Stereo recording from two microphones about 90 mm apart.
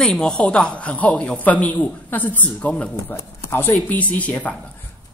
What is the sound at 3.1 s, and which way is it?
A woman's voice, 25° left (ahead or behind).